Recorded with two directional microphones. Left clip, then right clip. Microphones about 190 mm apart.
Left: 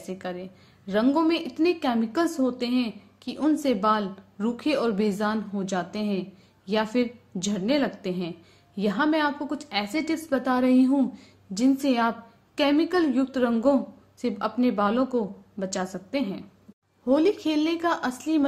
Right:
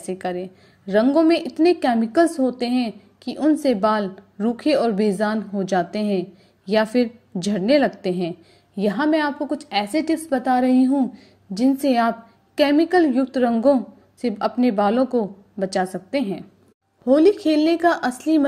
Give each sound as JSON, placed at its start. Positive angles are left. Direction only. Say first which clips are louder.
{"t": 0.0, "sound": "a woman's voice", "louder": "right 8 dB", "side_deg": -30}